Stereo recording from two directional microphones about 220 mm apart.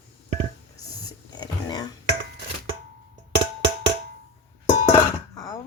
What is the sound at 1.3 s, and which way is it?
Music, 20° left (ahead or behind).